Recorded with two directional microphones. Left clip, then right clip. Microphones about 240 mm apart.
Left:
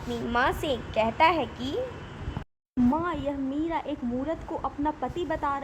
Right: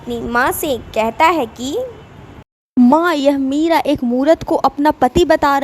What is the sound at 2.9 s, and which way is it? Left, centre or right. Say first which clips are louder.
Speech: right 17 dB; right.